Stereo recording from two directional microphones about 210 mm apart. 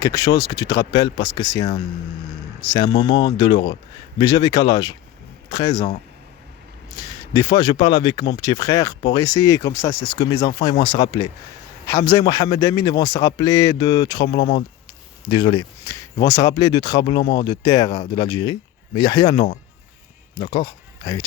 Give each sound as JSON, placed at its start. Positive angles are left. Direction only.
{"t": 0.0, "sound": "speech", "side_deg": 20}
{"t": 2.7, "sound": "speech", "side_deg": 20}
{"t": 6.9, "sound": "a man's voice", "side_deg": 20}